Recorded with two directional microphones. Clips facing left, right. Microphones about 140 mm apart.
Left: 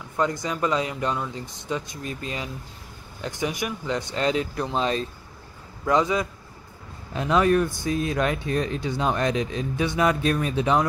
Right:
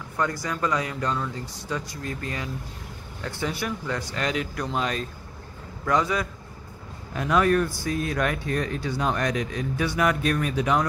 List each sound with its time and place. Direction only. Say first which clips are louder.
0.2 s speech: left 2 dB; 20° left (ahead or behind)